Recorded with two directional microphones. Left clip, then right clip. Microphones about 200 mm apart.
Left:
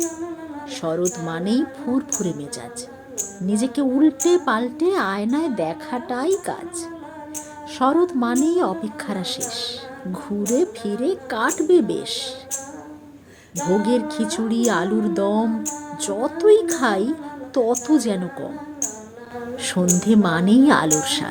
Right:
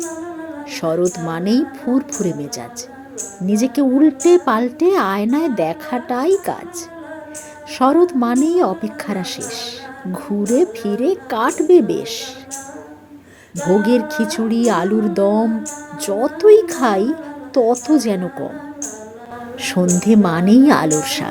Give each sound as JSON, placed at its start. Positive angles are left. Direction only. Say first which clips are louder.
{"t": 0.7, "sound": "a woman's voice", "louder": "right 5 dB", "side_deg": -20}
{"t": 13.8, "sound": "a woman's voice", "louder": "right 5 dB", "side_deg": -20}
{"t": 19.5, "sound": "a sound", "louder": "right 5 dB", "side_deg": -20}
{"t": 20.0, "sound": "a woman's voice", "louder": "right 4 dB", "side_deg": -20}